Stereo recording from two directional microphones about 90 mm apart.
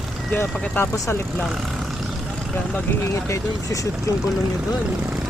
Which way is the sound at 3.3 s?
40° left (ahead or behind).